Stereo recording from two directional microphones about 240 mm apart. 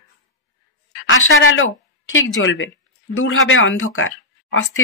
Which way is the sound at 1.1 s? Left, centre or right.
Left.